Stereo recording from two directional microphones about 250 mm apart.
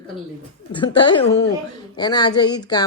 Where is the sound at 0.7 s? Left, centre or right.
Centre.